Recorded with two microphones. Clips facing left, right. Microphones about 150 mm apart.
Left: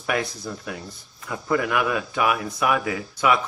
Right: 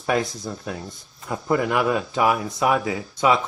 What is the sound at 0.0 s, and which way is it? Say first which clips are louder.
Speech: right 3 dB; 25° right (ahead or behind).